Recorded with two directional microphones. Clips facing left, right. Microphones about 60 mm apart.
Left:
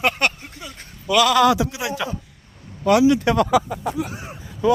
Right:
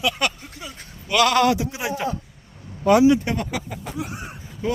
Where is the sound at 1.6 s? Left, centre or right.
Left.